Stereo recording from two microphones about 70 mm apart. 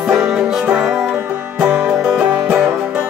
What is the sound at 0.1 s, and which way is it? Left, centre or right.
Music, centre.